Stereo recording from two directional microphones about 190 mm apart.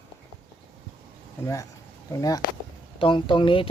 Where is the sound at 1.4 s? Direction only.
15° left (ahead or behind).